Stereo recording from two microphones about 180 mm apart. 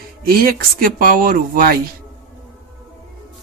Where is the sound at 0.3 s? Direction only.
55° right (ahead or behind).